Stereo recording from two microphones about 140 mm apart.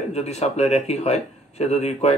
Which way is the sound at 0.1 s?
50° left (ahead or behind).